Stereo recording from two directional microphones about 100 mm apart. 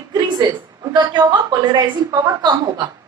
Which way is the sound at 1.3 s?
35° right (ahead or behind).